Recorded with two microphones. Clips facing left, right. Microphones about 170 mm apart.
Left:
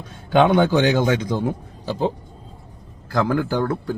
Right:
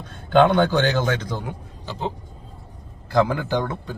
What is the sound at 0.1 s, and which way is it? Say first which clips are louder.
A man's voice: even; 10° left (ahead or behind).